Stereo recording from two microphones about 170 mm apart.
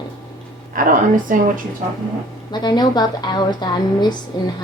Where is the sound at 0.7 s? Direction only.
50° right (ahead or behind).